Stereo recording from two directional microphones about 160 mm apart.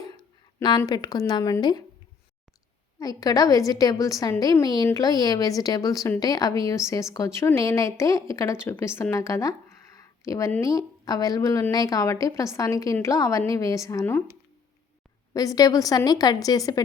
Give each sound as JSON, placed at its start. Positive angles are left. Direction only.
{"t": 0.2, "sound": "a sound", "side_deg": 30}
{"t": 0.8, "sound": "a woman's voice", "side_deg": 25}
{"t": 3.0, "sound": "a woman's voice", "side_deg": 25}
{"t": 15.3, "sound": "a woman's voice", "side_deg": 20}